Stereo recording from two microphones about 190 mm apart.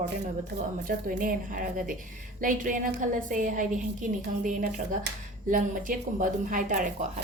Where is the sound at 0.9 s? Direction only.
45° right (ahead or behind).